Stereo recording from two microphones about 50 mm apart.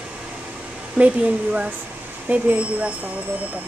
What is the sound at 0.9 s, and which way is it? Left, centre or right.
Speech, right.